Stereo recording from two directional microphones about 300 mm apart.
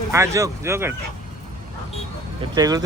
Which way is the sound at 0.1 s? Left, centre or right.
Centre.